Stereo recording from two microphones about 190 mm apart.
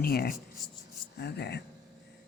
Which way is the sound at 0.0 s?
50° left (ahead or behind).